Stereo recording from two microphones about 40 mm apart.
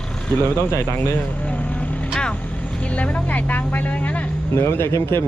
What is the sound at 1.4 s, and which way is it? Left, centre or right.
Vehicle, left.